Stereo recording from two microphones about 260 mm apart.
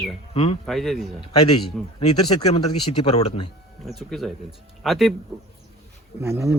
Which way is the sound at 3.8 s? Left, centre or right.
Centre.